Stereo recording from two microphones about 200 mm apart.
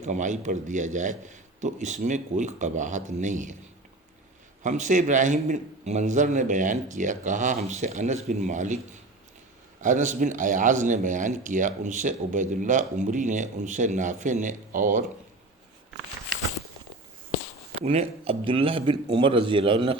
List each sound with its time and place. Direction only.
0.0 s a man's voice: 35° right (ahead or behind)
4.6 s a man's voice: 35° right (ahead or behind)
9.8 s a man's voice: 40° right (ahead or behind)
17.8 s a man's voice: 30° right (ahead or behind)